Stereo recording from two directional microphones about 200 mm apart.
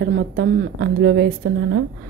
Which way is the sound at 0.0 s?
60° right (ahead or behind).